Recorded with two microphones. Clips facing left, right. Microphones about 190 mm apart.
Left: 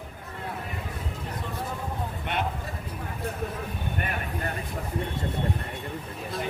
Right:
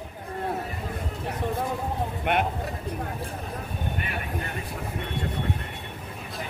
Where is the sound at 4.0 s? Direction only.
45° left (ahead or behind).